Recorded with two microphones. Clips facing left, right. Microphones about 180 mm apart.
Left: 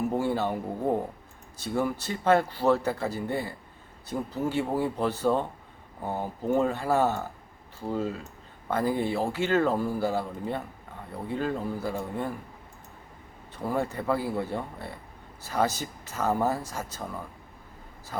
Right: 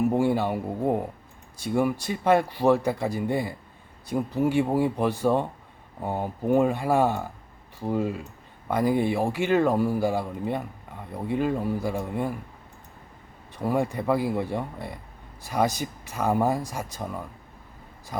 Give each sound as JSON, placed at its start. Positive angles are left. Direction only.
{"t": 0.1, "sound": "speech", "side_deg": -15}
{"t": 13.6, "sound": "speech", "side_deg": -15}
{"t": 18.1, "sound": "speech", "side_deg": -15}